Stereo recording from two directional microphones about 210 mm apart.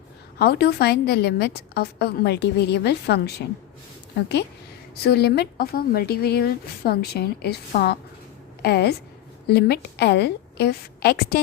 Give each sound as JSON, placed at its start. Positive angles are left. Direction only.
{"t": 0.3, "sound": "a woman's voice", "side_deg": 50}
{"t": 5.0, "sound": "a woman's voice", "side_deg": 50}